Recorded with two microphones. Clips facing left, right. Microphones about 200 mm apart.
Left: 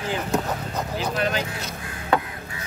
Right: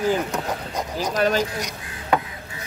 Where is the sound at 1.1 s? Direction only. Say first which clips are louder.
Right 6 dB; 40° right (ahead or behind).